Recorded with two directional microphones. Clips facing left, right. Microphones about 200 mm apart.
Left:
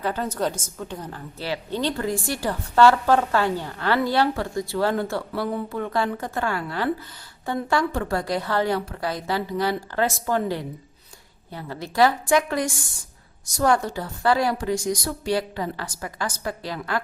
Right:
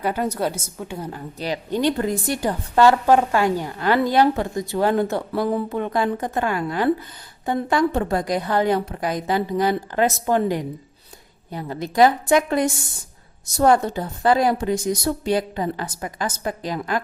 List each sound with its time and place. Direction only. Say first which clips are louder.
0.0 s a woman's voice: right 2 dB; 10° right (ahead or behind)